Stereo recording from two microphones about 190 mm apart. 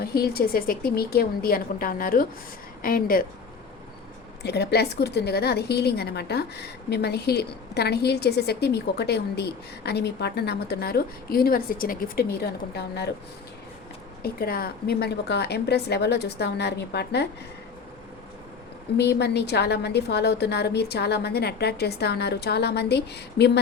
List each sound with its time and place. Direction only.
0.0 s speech: 55° left (ahead or behind)
4.4 s a woman's voice: 60° left (ahead or behind)
14.2 s a woman's voice: 55° left (ahead or behind)
18.9 s a woman's voice: 60° left (ahead or behind)